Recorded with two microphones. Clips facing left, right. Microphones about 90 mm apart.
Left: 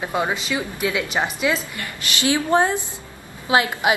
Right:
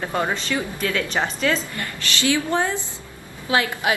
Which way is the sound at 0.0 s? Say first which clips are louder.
Left 1 dB; 10° left (ahead or behind).